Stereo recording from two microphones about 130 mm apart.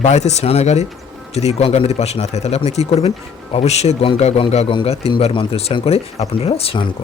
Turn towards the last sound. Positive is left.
turn(degrees=45)  # may be behind; listen again after turning